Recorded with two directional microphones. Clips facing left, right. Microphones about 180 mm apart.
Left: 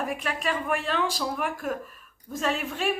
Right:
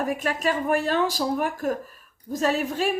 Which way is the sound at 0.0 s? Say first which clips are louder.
Right 5 dB; 40° right (ahead or behind).